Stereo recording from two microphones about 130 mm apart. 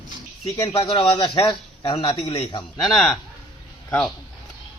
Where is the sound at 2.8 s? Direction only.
Centre (ahead or behind).